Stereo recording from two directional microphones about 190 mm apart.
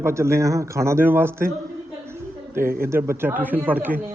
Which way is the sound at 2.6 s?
50° right (ahead or behind).